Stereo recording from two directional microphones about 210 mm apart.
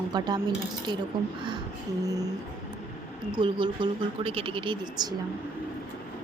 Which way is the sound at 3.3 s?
25° right (ahead or behind).